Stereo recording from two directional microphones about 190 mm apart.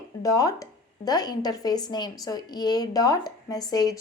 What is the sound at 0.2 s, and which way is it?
A woman's voice, 20° left (ahead or behind).